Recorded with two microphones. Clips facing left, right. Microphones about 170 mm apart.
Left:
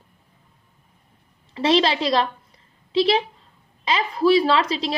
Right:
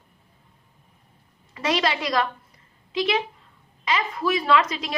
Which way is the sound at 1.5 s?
30° left (ahead or behind).